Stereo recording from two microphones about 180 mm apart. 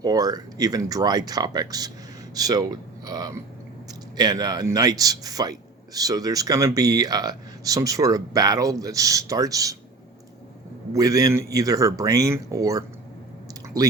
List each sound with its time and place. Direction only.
0.0 s a man's voice: 20° right (ahead or behind)
10.9 s a man's voice: 20° right (ahead or behind)